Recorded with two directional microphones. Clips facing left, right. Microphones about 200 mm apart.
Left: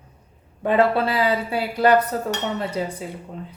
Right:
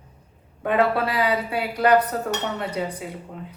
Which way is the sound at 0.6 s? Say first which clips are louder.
Left 2 dB; 30° left (ahead or behind).